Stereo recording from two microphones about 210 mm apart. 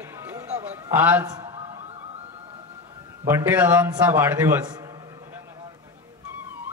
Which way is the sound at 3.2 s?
10° right (ahead or behind).